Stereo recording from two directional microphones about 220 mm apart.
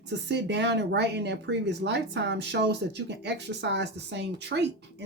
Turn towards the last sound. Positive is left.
turn(degrees=-50)  # may be behind; listen again after turning